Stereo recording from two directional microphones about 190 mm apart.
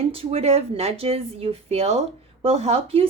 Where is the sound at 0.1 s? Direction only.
30° right (ahead or behind).